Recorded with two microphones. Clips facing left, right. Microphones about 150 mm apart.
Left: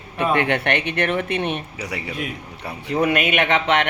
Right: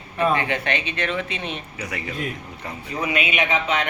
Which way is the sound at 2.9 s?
60° left (ahead or behind).